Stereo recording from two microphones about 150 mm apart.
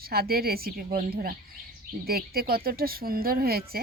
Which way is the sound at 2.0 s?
90° right.